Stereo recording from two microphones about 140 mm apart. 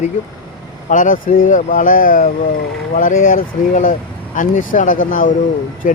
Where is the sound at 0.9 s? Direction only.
75° left (ahead or behind).